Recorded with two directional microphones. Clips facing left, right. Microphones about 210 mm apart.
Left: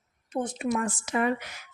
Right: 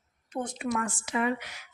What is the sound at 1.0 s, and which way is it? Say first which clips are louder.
Speech: left 1 dB; 45° left (ahead or behind).